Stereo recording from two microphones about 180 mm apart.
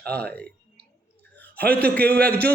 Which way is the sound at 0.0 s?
5° left (ahead or behind).